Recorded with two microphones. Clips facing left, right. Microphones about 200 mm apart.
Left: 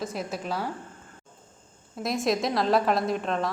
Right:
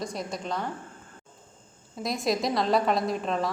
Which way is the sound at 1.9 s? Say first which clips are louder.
Left 2 dB; centre (ahead or behind).